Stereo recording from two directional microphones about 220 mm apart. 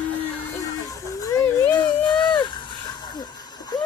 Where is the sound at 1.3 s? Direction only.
10° left (ahead or behind).